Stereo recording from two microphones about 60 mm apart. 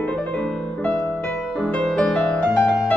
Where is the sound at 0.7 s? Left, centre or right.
Left.